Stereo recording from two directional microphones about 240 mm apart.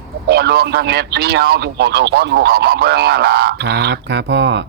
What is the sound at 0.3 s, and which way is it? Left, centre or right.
Speech, right.